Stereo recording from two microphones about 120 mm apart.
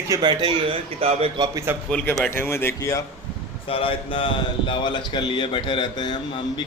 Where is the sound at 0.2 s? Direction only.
40° right (ahead or behind).